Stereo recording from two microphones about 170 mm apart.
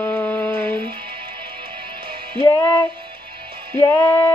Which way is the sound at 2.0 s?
30° right (ahead or behind).